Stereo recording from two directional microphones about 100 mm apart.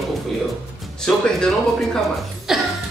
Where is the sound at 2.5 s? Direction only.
5° right (ahead or behind).